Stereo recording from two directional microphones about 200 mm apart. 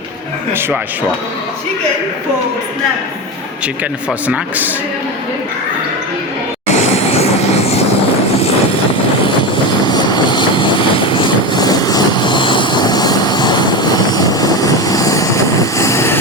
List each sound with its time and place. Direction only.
4.3 s a man's voice: 10° right (ahead or behind)
6.7 s vehicle: 30° left (ahead or behind)
9.2 s vehicle: 25° left (ahead or behind)